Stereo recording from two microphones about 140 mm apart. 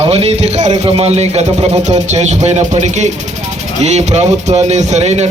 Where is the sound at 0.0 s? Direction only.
45° right (ahead or behind).